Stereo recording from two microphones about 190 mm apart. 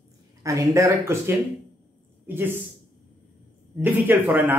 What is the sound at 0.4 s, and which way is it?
A man's voice, 15° right (ahead or behind).